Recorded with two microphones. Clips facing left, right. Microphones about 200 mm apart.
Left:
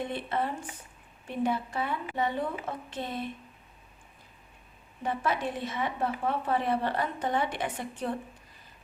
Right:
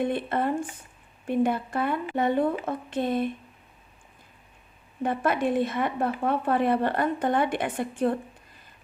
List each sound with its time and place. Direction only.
0.0 s a woman's voice: 55° right (ahead or behind)
5.0 s a woman's voice: 55° right (ahead or behind)